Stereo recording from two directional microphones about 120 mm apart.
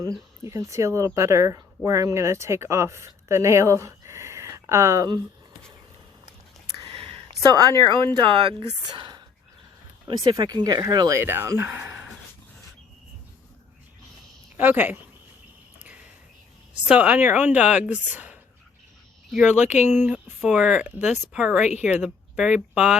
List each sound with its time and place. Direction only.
0.5 s speech: 25° right (ahead or behind)
6.9 s a sound: 50° right (ahead or behind)
7.4 s speech: 35° right (ahead or behind); by 12.0 s 15° right (ahead or behind)
14.5 s a woman's voice: 15° right (ahead or behind)
16.9 s a woman's voice: 10° right (ahead or behind)
19.8 s a woman's voice: 10° right (ahead or behind)